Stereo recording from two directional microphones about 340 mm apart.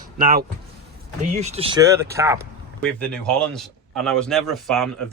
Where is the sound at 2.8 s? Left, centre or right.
Centre.